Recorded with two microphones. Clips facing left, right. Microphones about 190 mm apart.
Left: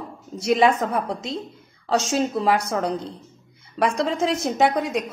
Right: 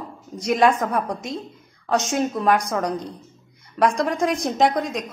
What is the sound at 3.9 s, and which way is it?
A woman's voice, 5° left (ahead or behind).